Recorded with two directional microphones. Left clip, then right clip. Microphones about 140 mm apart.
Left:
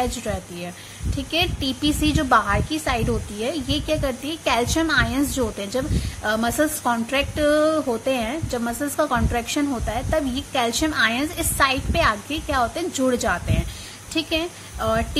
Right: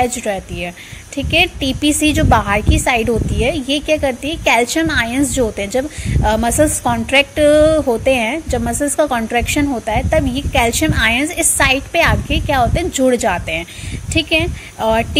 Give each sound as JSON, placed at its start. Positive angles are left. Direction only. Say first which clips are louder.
{"t": 0.0, "sound": "a woman's voice", "louder": "right 8 dB", "side_deg": -20}